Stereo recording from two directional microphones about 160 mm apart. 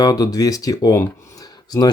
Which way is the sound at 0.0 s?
25° left (ahead or behind).